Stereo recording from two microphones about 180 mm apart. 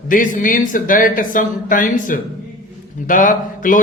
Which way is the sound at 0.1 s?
50° left (ahead or behind).